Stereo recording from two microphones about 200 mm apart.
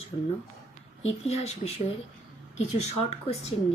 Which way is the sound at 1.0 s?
30° left (ahead or behind).